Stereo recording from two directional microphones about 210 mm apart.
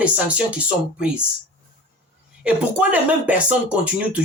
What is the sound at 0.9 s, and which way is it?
Speech, 5° right (ahead or behind).